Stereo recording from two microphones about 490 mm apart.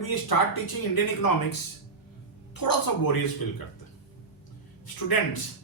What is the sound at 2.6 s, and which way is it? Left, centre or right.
Speech, left.